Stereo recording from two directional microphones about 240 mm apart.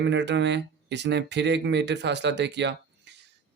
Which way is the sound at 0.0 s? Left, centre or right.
Right.